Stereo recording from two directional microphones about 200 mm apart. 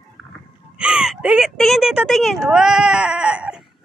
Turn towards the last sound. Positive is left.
turn(degrees=-5)  # may be behind; listen again after turning